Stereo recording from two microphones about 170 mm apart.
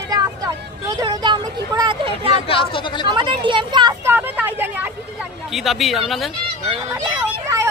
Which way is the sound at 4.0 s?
10° right (ahead or behind).